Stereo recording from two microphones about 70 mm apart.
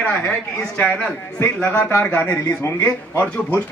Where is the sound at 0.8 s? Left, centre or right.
Left.